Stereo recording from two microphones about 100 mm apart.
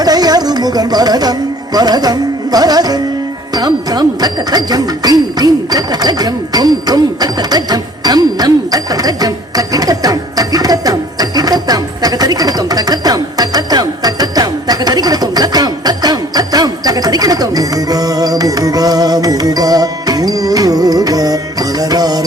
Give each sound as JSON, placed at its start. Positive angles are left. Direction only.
{"t": 0.0, "sound": "music", "side_deg": -40}
{"t": 3.5, "sound": "speech", "side_deg": -40}